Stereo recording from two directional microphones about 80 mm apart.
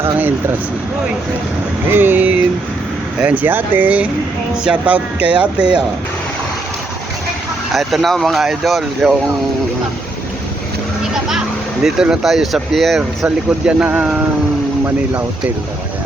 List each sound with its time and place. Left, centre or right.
1.9 s speech: right
7.7 s speech: centre
11.1 s speech: centre
13.0 s speech: centre